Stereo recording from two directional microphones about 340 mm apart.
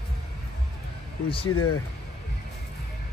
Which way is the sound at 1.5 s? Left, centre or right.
Left.